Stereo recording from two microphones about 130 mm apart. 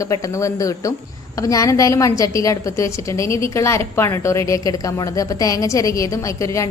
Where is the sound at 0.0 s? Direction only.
25° left (ahead or behind).